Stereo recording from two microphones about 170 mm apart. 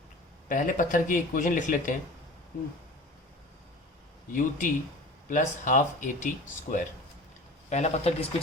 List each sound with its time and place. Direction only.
0.4 s speech: 50° left (ahead or behind)
4.3 s speech: 50° left (ahead or behind)